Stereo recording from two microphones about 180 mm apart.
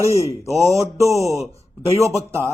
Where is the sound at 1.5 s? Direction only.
20° right (ahead or behind).